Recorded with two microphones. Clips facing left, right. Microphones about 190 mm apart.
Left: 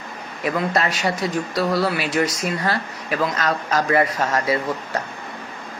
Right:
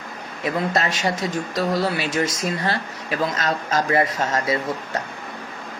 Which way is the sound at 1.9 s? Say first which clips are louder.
Left 2 dB; 25° right (ahead or behind).